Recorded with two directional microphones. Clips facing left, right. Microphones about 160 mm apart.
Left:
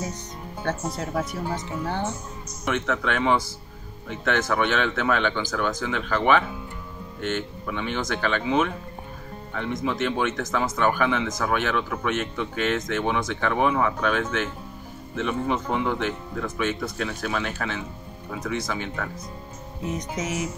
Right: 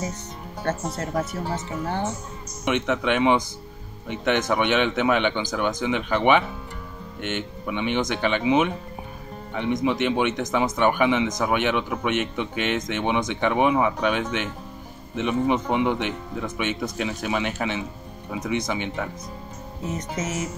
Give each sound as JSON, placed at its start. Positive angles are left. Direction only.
{"t": 0.7, "sound": "speech", "side_deg": -5}
{"t": 2.6, "sound": "speech", "side_deg": -20}
{"t": 7.6, "sound": "speech", "side_deg": -15}
{"t": 20.2, "sound": "music", "side_deg": 10}